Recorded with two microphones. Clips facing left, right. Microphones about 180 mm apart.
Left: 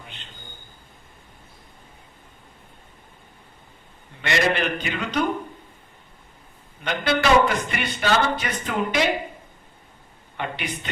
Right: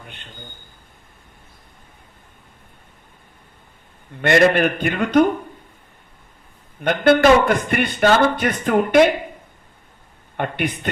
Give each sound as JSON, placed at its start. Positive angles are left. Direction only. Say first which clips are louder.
{"t": 0.0, "sound": "a sound", "louder": "right 2 dB", "side_deg": -55}
{"t": 4.2, "sound": "speech", "louder": "right 8 dB", "side_deg": -50}
{"t": 6.8, "sound": "speech", "louder": "right 8 dB", "side_deg": -50}
{"t": 10.3, "sound": "speech", "louder": "right 7 dB", "side_deg": -50}